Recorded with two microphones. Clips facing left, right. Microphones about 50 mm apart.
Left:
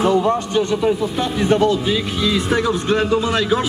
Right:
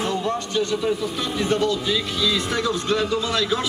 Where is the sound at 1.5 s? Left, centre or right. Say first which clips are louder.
Left 6 dB; left.